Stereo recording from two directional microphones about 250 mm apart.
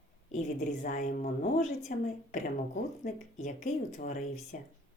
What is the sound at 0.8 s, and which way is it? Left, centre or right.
A woman's voice, left.